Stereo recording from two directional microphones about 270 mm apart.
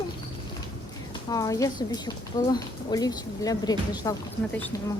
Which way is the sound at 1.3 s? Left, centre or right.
Centre.